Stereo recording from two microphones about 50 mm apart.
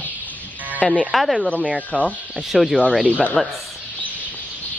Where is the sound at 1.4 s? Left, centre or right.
Centre.